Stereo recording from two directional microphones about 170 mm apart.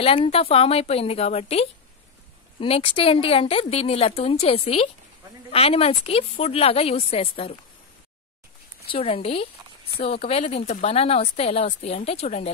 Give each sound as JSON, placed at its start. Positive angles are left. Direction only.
{"t": 0.0, "sound": "speech", "side_deg": 35}
{"t": 8.8, "sound": "speech", "side_deg": 35}